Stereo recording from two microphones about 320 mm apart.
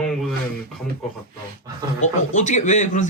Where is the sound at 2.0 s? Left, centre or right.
Left.